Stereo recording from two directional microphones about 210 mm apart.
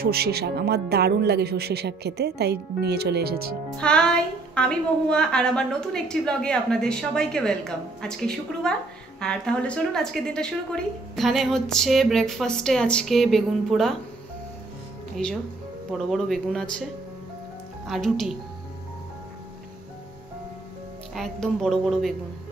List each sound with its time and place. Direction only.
0.0 s speech: 50° right (ahead or behind)
3.7 s a woman's voice: 5° left (ahead or behind)
15.2 s a woman's voice: 5° left (ahead or behind)
17.8 s a woman's voice: centre (ahead or behind)
21.1 s a woman's voice: centre (ahead or behind)